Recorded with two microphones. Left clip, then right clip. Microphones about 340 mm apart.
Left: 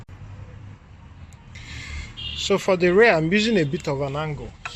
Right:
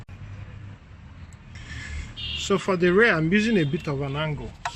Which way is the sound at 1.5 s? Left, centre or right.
Centre.